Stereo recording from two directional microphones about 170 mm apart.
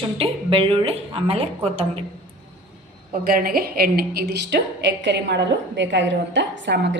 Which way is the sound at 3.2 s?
60° right (ahead or behind).